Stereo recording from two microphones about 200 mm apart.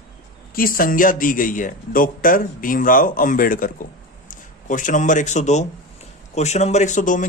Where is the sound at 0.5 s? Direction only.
45° left (ahead or behind).